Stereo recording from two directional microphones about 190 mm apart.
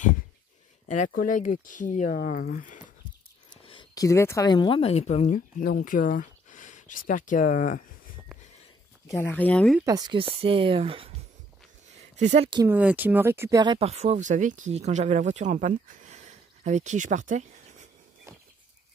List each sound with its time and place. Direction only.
0.8 s speech: 40° left (ahead or behind)
3.6 s a woman's voice: 25° left (ahead or behind); by 7.8 s 45° left (ahead or behind)
9.2 s speech: 10° left (ahead or behind)
9.8 s speech: 20° right (ahead or behind)
12.0 s a sound: 40° right (ahead or behind)
12.6 s speech: 10° right (ahead or behind)
13.7 s speech: 35° right (ahead or behind)